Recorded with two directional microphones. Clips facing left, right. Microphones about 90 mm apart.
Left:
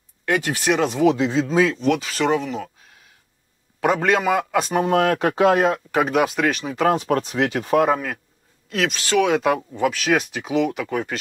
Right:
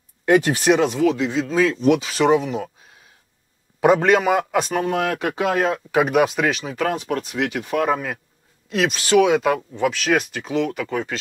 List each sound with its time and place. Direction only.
0.2 s speech: 25° right (ahead or behind)
0.7 s speech: 5° right (ahead or behind)
1.0 s speech: 30° left (ahead or behind)
1.8 s speech: 10° right (ahead or behind)
3.8 s speech: 15° right (ahead or behind)
4.6 s speech: 5° left (ahead or behind)
5.1 s speech: 35° left (ahead or behind)
5.7 s speech: 5° right (ahead or behind)
7.0 s speech: 40° left (ahead or behind)
8.6 s speech: 10° right (ahead or behind)
9.5 s speech: 10° left (ahead or behind)